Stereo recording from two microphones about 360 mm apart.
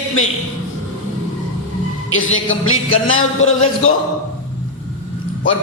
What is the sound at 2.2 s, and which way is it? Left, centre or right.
Music, left.